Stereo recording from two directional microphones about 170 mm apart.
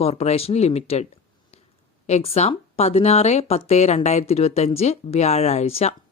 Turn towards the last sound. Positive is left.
turn(degrees=35)  # may be behind; listen again after turning